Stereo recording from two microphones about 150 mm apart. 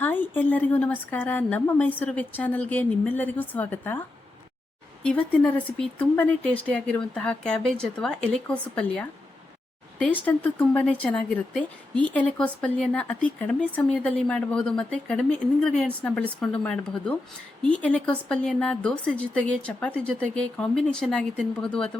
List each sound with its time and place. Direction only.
0.0 s speech: 15° left (ahead or behind)
5.0 s speech: 10° left (ahead or behind)
10.2 s speech: 10° left (ahead or behind)